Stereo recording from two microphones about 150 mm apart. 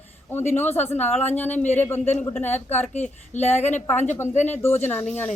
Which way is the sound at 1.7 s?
15° left (ahead or behind).